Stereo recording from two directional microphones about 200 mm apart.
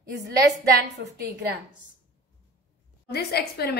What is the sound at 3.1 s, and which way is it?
Speech, 50° left (ahead or behind).